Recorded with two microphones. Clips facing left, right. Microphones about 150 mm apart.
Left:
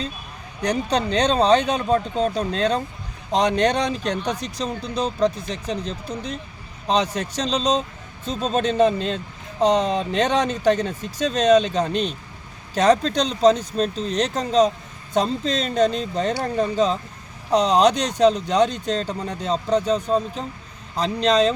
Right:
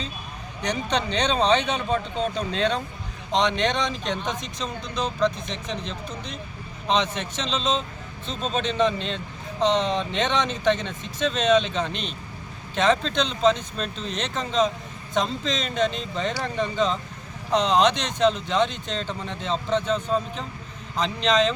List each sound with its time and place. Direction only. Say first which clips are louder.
0.6 s speech: left 4 dB; 35° left (ahead or behind)